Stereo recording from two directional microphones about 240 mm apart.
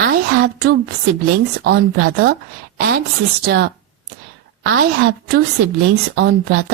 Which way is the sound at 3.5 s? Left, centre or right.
Right.